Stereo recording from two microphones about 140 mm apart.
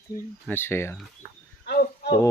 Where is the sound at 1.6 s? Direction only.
90° left.